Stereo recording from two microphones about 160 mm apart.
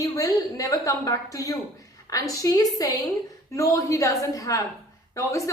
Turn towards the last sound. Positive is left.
turn(degrees=20)  # may be behind; listen again after turning